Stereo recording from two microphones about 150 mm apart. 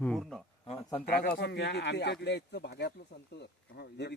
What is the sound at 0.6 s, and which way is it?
Speech, 40° left (ahead or behind).